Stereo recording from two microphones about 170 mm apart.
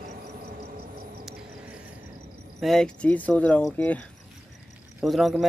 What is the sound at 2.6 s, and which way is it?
Speech, centre (ahead or behind).